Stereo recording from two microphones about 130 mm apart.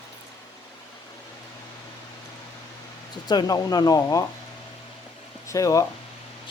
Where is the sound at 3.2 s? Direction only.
30° left (ahead or behind).